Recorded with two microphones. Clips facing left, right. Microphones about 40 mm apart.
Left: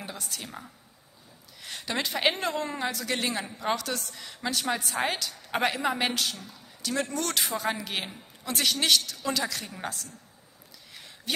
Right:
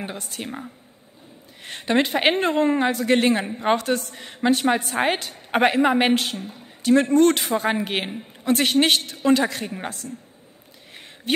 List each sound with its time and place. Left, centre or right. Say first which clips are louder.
0.0 s a woman's voice: right 7 dB; right
11.3 s a woman's voice: right 9 dB; right